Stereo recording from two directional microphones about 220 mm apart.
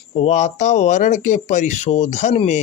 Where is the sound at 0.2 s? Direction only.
30° left (ahead or behind).